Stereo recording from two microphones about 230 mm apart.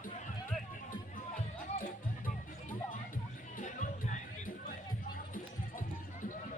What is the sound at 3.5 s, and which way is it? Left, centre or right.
Music, left.